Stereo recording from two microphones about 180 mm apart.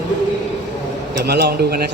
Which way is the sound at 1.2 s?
65° right (ahead or behind).